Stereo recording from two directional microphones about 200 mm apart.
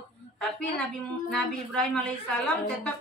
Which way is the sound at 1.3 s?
5° left (ahead or behind).